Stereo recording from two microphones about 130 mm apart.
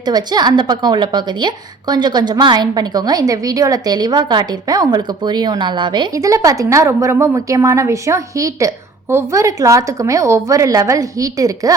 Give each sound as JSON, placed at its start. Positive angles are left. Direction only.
{"t": 0.0, "sound": "a woman's voice", "side_deg": -35}
{"t": 6.1, "sound": "a woman's voice", "side_deg": -25}